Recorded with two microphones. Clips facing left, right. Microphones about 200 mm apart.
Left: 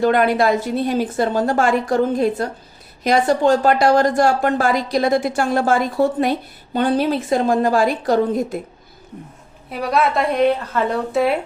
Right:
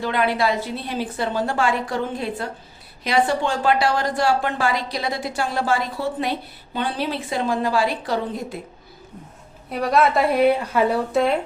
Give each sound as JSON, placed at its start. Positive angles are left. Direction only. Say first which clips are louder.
{"t": 0.0, "sound": "a woman's voice", "louder": "left 6 dB", "side_deg": 45}
{"t": 9.6, "sound": "a woman's voice", "louder": "even", "side_deg": 0}